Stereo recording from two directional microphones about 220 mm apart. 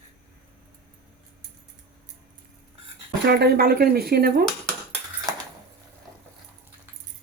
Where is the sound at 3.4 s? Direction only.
45° right (ahead or behind).